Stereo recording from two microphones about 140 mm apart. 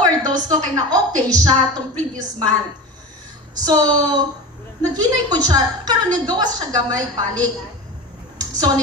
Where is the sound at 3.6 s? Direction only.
30° right (ahead or behind).